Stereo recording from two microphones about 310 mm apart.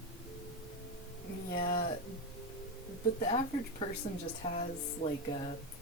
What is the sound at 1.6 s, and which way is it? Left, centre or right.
Speech, centre.